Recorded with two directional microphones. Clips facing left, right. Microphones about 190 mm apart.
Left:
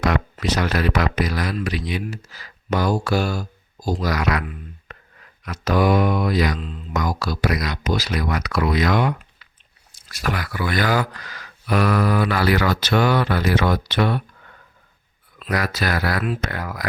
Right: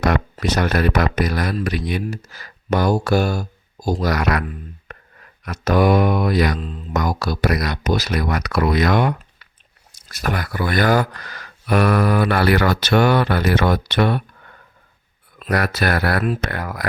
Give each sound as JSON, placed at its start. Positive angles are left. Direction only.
{"t": 0.0, "sound": "speech", "side_deg": -50}
{"t": 5.5, "sound": "speech", "side_deg": -55}
{"t": 10.2, "sound": "speech", "side_deg": -50}
{"t": 15.4, "sound": "speech", "side_deg": -55}